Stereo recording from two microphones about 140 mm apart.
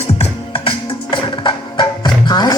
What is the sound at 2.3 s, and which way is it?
Music, 30° left (ahead or behind).